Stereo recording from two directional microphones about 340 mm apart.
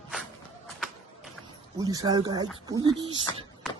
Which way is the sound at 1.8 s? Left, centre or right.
Centre.